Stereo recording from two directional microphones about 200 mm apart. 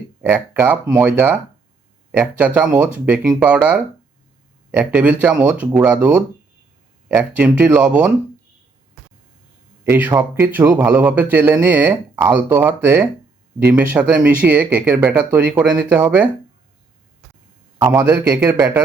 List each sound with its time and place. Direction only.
0.2 s a man's voice: 5° right (ahead or behind)
9.8 s a man's voice: 10° right (ahead or behind)
17.7 s a man's voice: 20° right (ahead or behind)